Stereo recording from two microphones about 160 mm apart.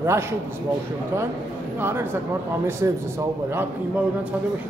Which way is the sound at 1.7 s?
15° right (ahead or behind).